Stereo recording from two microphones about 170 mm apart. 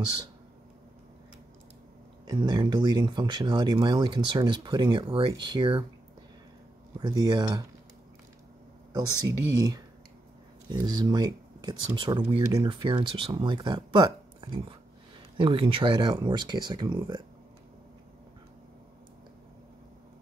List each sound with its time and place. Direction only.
0.0 s speech: 25° right (ahead or behind)
2.2 s speech: 25° right (ahead or behind)
7.0 s speech: 25° right (ahead or behind)
8.9 s speech: 20° right (ahead or behind)